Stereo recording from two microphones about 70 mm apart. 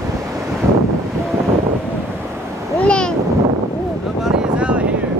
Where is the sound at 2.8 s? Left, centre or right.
Centre.